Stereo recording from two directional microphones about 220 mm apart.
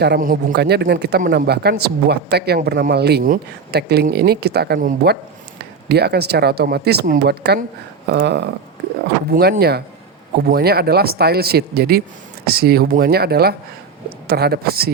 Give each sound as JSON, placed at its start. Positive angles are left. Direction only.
{"t": 0.0, "sound": "speech", "side_deg": -45}